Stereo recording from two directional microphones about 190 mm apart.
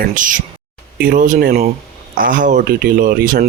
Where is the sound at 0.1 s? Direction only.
45° right (ahead or behind).